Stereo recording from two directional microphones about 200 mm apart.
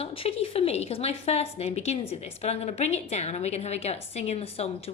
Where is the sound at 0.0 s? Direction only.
30° left (ahead or behind).